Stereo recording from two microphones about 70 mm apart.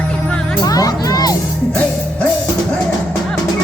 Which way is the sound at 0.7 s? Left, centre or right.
Left.